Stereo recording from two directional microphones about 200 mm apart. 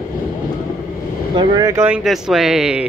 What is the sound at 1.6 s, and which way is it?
Speech, 15° right (ahead or behind).